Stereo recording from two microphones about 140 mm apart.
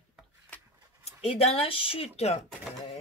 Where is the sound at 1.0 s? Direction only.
45° left (ahead or behind).